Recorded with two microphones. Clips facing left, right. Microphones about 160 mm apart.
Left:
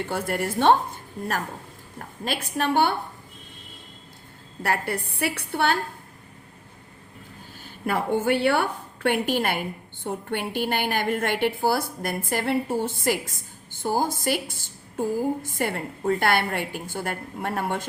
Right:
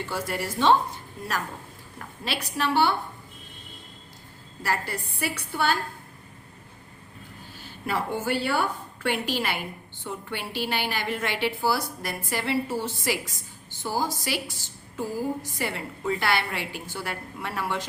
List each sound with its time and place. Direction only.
0.0 s a woman's voice: 55° left (ahead or behind)
2.0 s a woman's voice: 50° left (ahead or behind)
4.6 s a woman's voice: 60° left (ahead or behind)
7.6 s a woman's voice: 50° left (ahead or behind)